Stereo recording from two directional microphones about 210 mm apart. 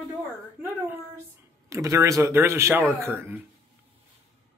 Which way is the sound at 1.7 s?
15° right (ahead or behind).